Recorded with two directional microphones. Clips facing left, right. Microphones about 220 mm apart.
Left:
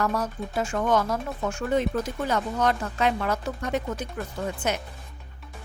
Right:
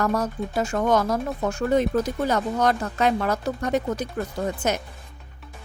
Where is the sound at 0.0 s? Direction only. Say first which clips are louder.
Right 3 dB; 45° right (ahead or behind).